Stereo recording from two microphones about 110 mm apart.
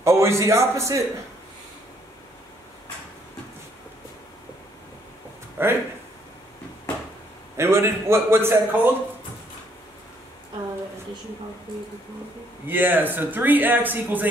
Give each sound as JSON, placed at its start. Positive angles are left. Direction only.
{"t": 0.0, "sound": "a man's voice", "side_deg": -25}
{"t": 5.6, "sound": "speech", "side_deg": -20}
{"t": 7.5, "sound": "a man's voice", "side_deg": -25}
{"t": 12.6, "sound": "speech", "side_deg": -15}